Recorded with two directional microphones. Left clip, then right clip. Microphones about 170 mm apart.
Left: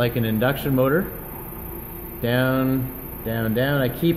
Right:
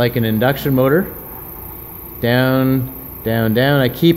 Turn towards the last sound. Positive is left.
turn(degrees=-40)  # may be behind; listen again after turning